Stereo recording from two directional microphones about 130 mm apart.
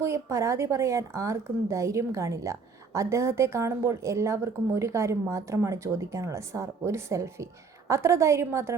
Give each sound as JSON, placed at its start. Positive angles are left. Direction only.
{"t": 0.0, "sound": "a woman's voice", "side_deg": -20}